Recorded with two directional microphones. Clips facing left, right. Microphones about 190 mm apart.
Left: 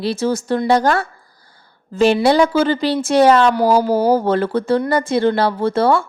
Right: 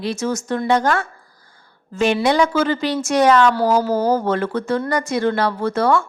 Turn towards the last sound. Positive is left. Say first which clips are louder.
# left 2 dB
turn(degrees=30)  # may be behind; listen again after turning